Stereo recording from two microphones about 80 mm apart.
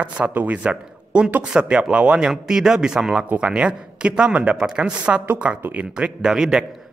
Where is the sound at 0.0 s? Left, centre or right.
Centre.